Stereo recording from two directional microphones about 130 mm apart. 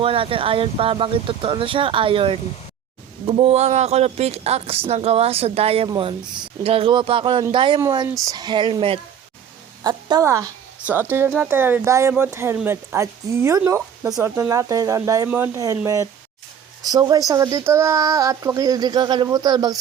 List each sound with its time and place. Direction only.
0.0 s a woman's voice: 45° right (ahead or behind)
7.8 s speech: 25° right (ahead or behind); by 9.0 s 40° right (ahead or behind)
9.8 s speech: 30° right (ahead or behind)